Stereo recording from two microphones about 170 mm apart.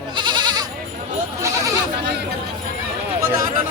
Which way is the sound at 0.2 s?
25° right (ahead or behind).